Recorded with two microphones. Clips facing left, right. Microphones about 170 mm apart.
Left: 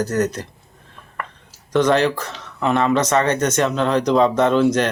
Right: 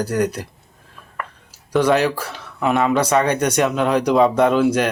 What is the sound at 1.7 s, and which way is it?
Speech, 10° right (ahead or behind).